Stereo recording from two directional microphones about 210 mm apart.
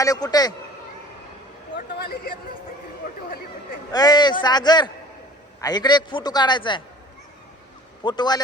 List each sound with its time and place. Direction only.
0.0 s a man's voice: 15° left (ahead or behind)
2.0 s speech: 45° left (ahead or behind)
3.9 s a man's voice: 20° left (ahead or behind)
8.0 s a man's voice: 20° left (ahead or behind)